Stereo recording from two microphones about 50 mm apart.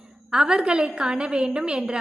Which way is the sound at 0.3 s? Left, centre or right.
Centre.